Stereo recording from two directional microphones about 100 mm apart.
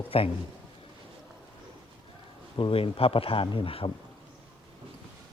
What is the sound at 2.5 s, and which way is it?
Speech, 65° left (ahead or behind).